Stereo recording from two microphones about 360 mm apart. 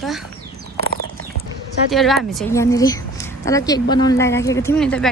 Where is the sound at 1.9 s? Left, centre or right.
Centre.